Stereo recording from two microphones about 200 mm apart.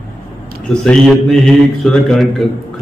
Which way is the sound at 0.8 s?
Centre (ahead or behind).